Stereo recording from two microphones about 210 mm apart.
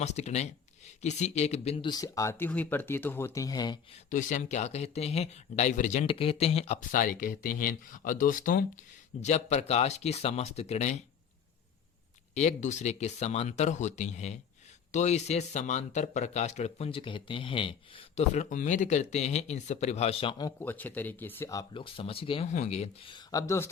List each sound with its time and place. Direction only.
0.0 s speech: 30° left (ahead or behind)
4.1 s speech: 35° left (ahead or behind)
12.3 s speech: 35° left (ahead or behind)
20.6 s speech: 10° left (ahead or behind)